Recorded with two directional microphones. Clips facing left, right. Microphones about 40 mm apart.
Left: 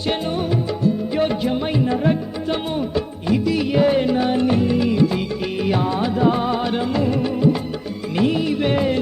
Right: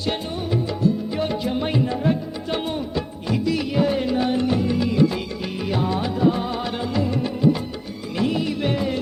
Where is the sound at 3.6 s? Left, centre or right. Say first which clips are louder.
Left 7 dB; left.